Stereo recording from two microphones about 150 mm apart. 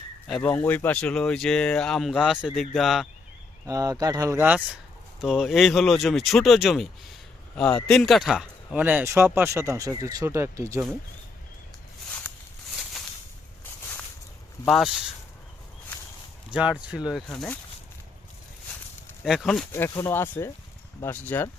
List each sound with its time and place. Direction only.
0.3 s speech: 5° left (ahead or behind)
3.7 s a man's voice: 25° right (ahead or behind)
14.7 s speech: centre (ahead or behind)
16.5 s speech: 5° right (ahead or behind)
17.1 s speech: 5° left (ahead or behind)
19.2 s speech: centre (ahead or behind)
19.9 s speech: 20° left (ahead or behind)